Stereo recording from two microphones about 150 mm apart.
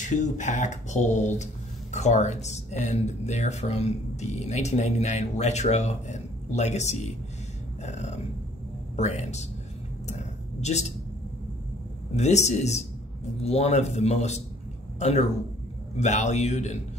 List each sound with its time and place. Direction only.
0.0 s speech: 55° left (ahead or behind)
10.0 s a sound: 50° left (ahead or behind)
12.2 s a man's voice: 50° left (ahead or behind)